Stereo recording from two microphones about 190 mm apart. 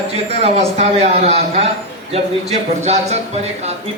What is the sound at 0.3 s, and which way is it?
A man's voice, 35° right (ahead or behind).